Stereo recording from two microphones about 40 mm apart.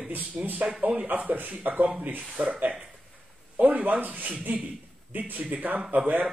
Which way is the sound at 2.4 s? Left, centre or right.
Right.